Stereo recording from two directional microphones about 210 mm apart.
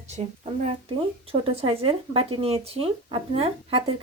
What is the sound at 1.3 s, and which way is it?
Speech, 25° right (ahead or behind).